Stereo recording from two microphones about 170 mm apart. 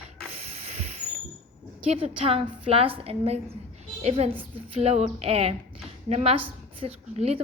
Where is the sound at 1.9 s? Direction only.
35° right (ahead or behind).